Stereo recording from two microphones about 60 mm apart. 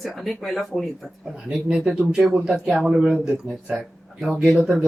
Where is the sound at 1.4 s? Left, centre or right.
Centre.